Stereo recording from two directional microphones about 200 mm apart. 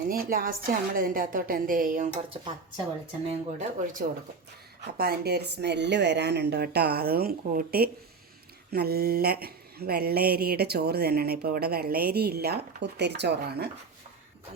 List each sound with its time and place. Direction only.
0.1 s speech: 45° right (ahead or behind)
2.3 s speech: 25° right (ahead or behind)
4.9 s speech: 50° right (ahead or behind)